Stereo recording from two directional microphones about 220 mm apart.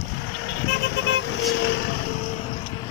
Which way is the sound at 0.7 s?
50° left (ahead or behind).